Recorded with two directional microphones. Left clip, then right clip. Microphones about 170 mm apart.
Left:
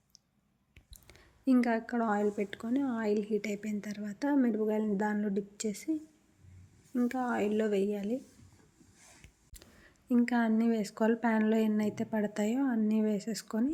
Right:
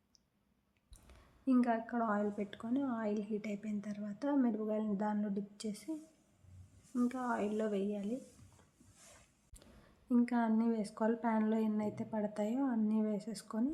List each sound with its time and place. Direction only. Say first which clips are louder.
1.0 s a woman's voice: left 5 dB; 20° left (ahead or behind)
6.9 s a woman's voice: left 5 dB; 20° left (ahead or behind)
10.1 s a woman's voice: left 4 dB; 15° left (ahead or behind)